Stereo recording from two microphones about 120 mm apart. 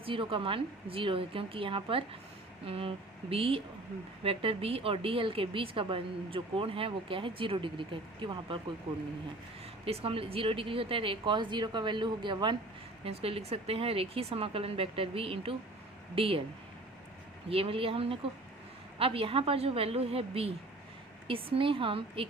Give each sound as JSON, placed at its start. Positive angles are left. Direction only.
{"t": 0.0, "sound": "a woman's voice", "side_deg": -45}
{"t": 9.8, "sound": "a woman's voice", "side_deg": -50}
{"t": 13.1, "sound": "a woman's voice", "side_deg": -55}
{"t": 17.5, "sound": "a woman's voice", "side_deg": -50}